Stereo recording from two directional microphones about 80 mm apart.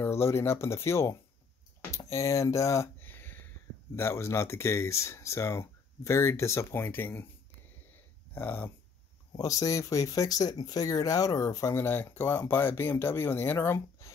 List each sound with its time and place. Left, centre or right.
0.0 s speech: left
3.0 s speech: left
8.4 s speech: left
9.4 s speech: left